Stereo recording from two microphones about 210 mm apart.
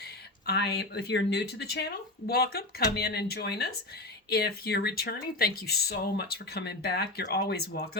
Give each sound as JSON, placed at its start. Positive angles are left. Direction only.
{"t": 0.0, "sound": "speech", "side_deg": 50}